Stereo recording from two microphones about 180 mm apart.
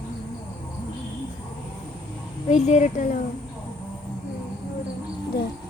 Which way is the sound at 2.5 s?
40° left (ahead or behind).